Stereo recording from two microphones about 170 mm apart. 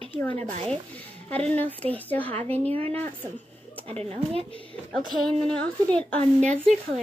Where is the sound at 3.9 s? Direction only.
35° right (ahead or behind).